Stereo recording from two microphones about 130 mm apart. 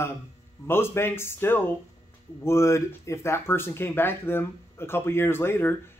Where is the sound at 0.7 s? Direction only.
20° left (ahead or behind).